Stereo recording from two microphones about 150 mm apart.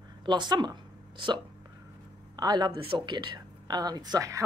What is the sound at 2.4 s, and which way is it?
A woman's voice, 25° right (ahead or behind).